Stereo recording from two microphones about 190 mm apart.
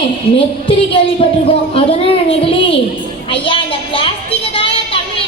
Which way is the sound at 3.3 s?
25° left (ahead or behind).